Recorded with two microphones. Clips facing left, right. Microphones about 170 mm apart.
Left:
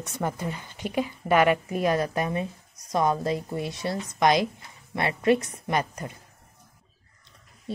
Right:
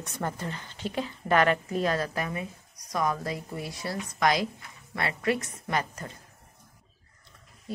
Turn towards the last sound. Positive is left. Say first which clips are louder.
# left 3 dB
turn(degrees=25)  # may be behind; listen again after turning